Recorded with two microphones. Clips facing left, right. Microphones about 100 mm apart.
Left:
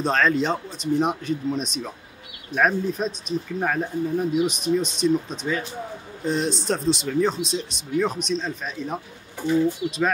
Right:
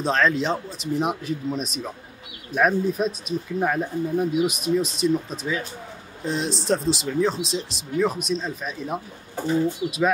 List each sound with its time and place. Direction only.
0.0 s speech: centre (ahead or behind)
9.3 s bird: 40° right (ahead or behind)